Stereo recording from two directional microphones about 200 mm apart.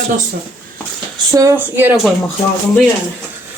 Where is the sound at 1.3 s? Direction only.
15° right (ahead or behind).